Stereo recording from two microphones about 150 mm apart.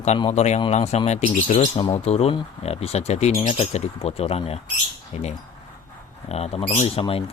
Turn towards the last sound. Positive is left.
turn(degrees=40)  # may be behind; listen again after turning